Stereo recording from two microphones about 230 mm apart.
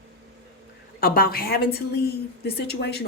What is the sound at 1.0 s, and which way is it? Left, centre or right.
A woman's voice, left.